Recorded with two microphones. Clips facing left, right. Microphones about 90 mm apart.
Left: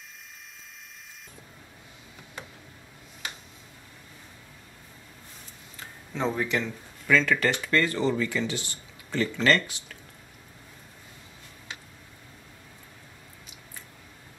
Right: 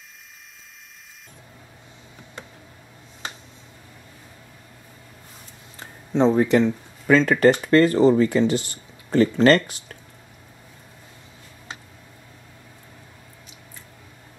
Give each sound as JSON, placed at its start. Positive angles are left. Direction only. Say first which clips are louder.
{"t": 6.3, "sound": "speech", "louder": "right 11 dB", "side_deg": -40}